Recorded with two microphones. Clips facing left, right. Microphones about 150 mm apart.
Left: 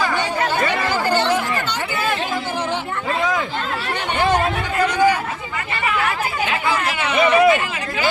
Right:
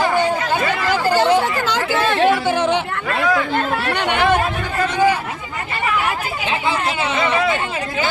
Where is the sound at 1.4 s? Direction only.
90° right.